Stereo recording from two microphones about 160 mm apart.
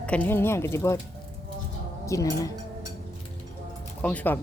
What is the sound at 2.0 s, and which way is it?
Speech, 20° left (ahead or behind).